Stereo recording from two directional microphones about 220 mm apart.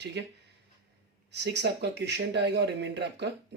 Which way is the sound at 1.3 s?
50° right (ahead or behind).